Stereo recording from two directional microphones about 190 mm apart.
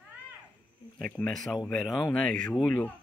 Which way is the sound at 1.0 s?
5° left (ahead or behind).